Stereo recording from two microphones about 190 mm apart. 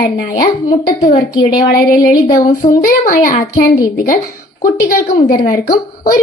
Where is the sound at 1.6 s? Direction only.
50° left (ahead or behind).